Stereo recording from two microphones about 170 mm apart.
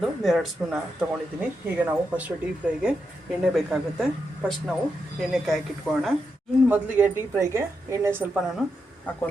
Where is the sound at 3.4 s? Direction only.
Centre (ahead or behind).